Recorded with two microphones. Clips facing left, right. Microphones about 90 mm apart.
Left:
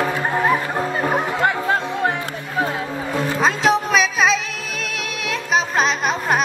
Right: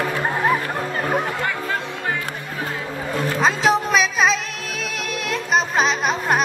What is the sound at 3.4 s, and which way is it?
Music, centre (ahead or behind).